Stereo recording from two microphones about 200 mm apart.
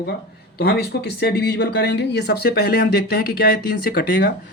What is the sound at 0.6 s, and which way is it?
Speech, 55° left (ahead or behind).